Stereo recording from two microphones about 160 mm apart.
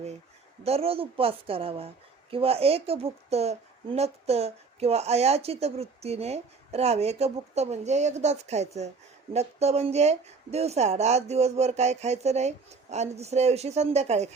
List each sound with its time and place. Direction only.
0.6 s speech: 40° right (ahead or behind)